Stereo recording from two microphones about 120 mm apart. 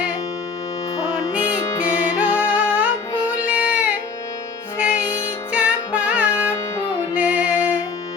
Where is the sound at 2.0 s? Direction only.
15° right (ahead or behind).